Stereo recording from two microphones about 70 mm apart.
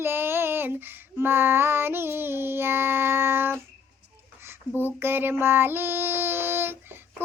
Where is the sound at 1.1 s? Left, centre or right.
Right.